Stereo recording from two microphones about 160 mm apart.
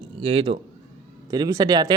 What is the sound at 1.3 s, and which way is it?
Speech, 25° right (ahead or behind).